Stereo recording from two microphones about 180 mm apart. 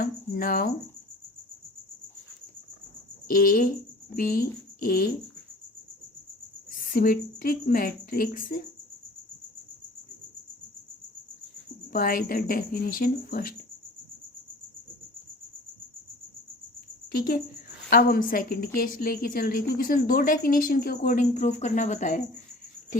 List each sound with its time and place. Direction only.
0.0 s cricket: 55° left (ahead or behind)
3.2 s a woman's voice: 50° left (ahead or behind)
6.9 s a woman's voice: 50° left (ahead or behind)
11.9 s a woman's voice: 55° left (ahead or behind)
17.1 s a woman's voice: 55° left (ahead or behind)